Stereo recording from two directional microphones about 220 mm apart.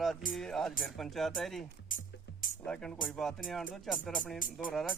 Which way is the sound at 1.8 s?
35° left (ahead or behind).